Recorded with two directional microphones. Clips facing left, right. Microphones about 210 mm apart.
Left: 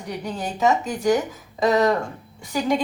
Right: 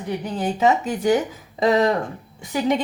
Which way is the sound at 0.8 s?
20° right (ahead or behind).